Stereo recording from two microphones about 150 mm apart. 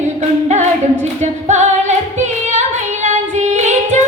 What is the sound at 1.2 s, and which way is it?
Music, 50° right (ahead or behind).